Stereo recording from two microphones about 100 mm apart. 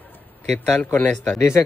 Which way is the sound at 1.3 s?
30° left (ahead or behind).